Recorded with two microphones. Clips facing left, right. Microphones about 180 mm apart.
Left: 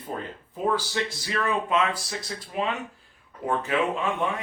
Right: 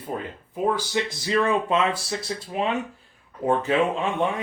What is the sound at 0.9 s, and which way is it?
Speech, 25° right (ahead or behind).